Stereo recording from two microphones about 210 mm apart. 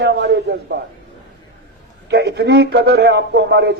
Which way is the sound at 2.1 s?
50° right (ahead or behind).